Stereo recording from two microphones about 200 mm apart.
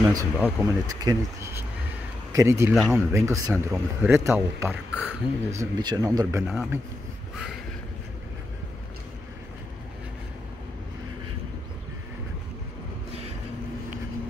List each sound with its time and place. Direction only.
0.1 s speech: 15° right (ahead or behind)
5.6 s speech: 20° right (ahead or behind)
6.4 s a man's voice: centre (ahead or behind)